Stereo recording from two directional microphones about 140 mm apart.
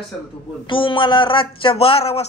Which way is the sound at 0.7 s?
40° left (ahead or behind).